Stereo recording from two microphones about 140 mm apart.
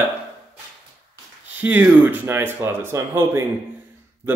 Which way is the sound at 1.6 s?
10° right (ahead or behind).